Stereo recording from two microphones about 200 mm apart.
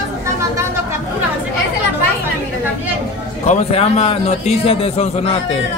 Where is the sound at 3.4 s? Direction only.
30° left (ahead or behind).